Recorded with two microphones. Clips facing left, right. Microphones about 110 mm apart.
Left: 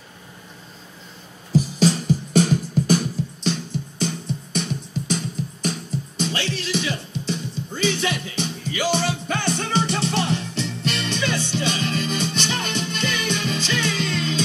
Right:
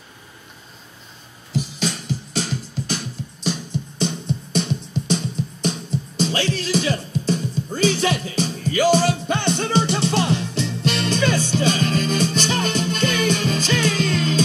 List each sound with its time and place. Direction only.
1.5 s music: 40° left (ahead or behind)
4.0 s music: 25° right (ahead or behind)
9.3 s music: 25° right (ahead or behind)